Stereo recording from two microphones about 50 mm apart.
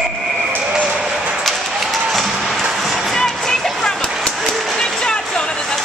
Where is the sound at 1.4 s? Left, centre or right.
Centre.